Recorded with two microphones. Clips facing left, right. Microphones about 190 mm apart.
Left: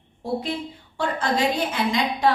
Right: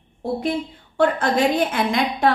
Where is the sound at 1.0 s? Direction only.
55° right (ahead or behind).